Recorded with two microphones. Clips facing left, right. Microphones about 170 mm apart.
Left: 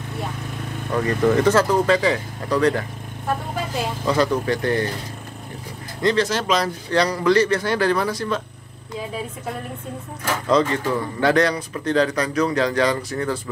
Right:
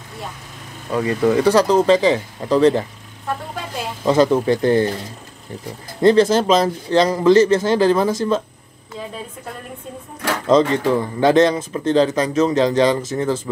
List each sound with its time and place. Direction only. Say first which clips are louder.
0.9 s speech: right 2 dB; 10° right (ahead or behind)
4.0 s speech: right 6 dB; 25° right (ahead or behind)
5.9 s speech: right 7 dB; 30° right (ahead or behind)
10.4 s speech: right 5 dB; 25° right (ahead or behind)